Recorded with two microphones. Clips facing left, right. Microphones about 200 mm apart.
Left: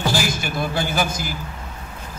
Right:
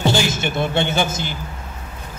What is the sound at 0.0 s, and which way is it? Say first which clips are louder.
A man's voice: right 3 dB; 25° right (ahead or behind).